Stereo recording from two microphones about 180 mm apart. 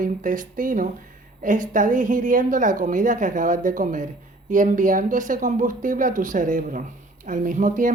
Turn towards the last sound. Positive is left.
turn(degrees=-45)  # may be behind; listen again after turning